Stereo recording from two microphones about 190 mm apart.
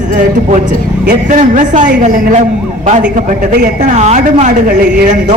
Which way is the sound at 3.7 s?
40° right (ahead or behind).